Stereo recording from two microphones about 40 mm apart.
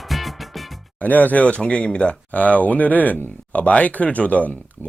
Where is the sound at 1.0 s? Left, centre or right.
Left.